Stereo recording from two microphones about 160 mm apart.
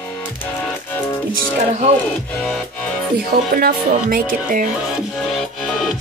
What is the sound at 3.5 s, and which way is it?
Speech, 65° right (ahead or behind).